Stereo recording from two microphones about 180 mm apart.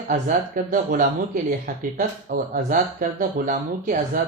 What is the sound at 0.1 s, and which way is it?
Speech, 45° right (ahead or behind).